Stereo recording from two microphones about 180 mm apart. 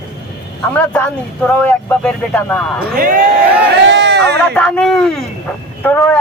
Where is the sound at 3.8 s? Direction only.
75° right (ahead or behind).